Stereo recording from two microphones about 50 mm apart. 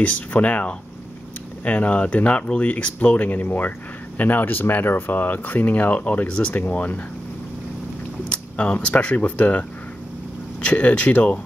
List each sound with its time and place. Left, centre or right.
0.0 s speech: left
8.3 s speech: left